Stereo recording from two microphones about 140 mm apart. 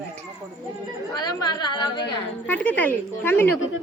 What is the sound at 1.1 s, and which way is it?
A woman's voice, 30° left (ahead or behind).